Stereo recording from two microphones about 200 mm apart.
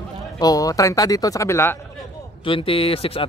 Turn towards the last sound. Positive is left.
turn(degrees=30)  # may be behind; listen again after turning